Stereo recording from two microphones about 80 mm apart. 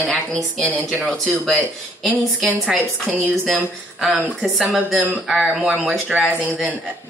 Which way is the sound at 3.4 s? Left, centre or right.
Centre.